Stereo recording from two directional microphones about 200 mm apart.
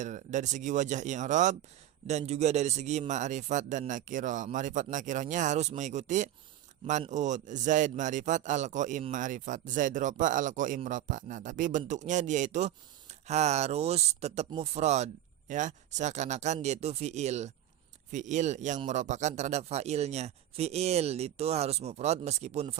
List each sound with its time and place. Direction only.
0.0 s speech: 40° right (ahead or behind)